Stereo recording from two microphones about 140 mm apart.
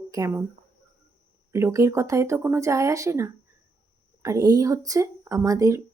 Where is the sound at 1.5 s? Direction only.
20° right (ahead or behind).